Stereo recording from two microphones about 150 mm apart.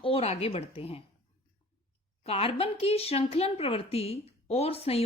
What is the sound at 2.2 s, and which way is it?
Speech, 40° left (ahead or behind).